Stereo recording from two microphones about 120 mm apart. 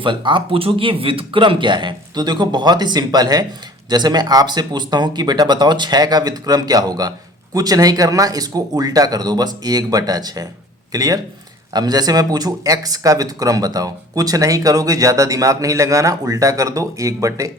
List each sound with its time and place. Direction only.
0.0 s speech: 40° right (ahead or behind)